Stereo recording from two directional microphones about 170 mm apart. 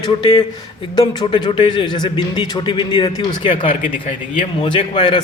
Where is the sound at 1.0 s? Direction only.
25° left (ahead or behind).